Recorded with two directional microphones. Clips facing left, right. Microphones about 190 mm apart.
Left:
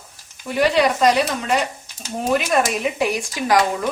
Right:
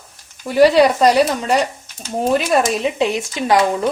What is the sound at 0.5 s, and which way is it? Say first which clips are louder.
Speech: right 6 dB; 35° right (ahead or behind).